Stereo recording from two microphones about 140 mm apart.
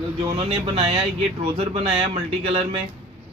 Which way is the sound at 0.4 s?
40° right (ahead or behind).